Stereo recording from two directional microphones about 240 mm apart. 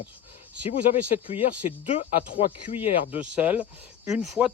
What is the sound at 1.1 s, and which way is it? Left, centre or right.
Speech, left.